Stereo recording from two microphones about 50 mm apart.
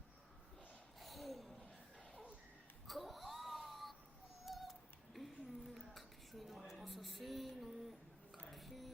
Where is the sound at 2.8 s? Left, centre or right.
Centre.